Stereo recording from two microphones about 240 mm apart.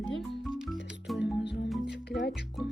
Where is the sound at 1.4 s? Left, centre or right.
Left.